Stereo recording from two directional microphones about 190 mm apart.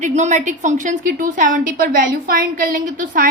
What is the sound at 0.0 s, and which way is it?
A woman's voice, 40° right (ahead or behind).